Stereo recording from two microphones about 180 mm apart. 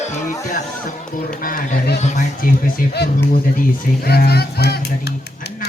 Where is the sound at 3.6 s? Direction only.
55° left (ahead or behind).